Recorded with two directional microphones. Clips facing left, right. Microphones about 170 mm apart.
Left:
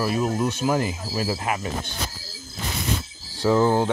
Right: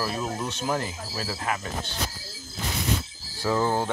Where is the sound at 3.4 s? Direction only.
15° left (ahead or behind).